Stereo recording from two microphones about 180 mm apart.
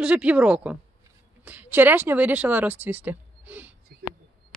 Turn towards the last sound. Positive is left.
turn(degrees=-10)  # may be behind; listen again after turning